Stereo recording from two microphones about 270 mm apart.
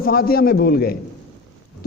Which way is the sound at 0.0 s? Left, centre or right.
Left.